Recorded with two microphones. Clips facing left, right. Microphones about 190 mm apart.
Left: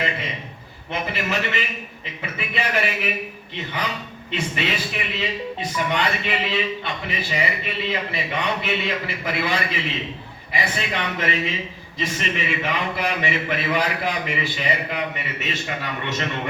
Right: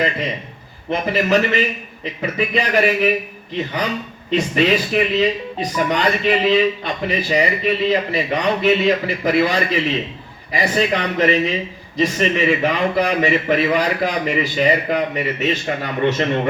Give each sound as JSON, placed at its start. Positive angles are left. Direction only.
{"t": 0.9, "sound": "speech", "side_deg": -40}